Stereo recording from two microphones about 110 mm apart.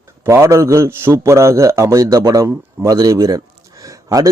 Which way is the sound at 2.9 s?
30° right (ahead or behind).